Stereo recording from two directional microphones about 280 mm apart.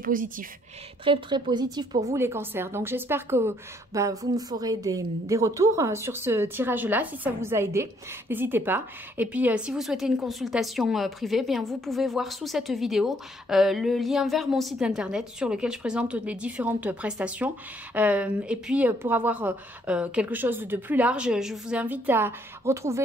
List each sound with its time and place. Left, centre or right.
0.0 s a woman's voice: right
1.0 s a woman's voice: centre